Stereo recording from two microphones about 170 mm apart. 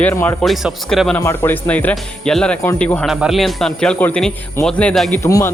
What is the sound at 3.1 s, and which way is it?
Speech, centre (ahead or behind).